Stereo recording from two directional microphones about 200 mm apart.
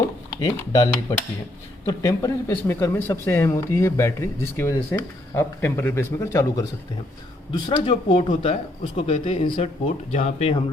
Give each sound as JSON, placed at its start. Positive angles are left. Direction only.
{"t": 0.3, "sound": "speech", "side_deg": 20}
{"t": 1.9, "sound": "speech", "side_deg": 15}